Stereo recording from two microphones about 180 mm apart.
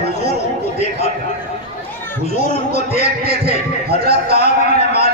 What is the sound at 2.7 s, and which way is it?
A man's voice, 60° right (ahead or behind).